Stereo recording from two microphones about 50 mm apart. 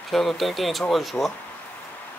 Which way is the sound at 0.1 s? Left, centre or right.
Centre.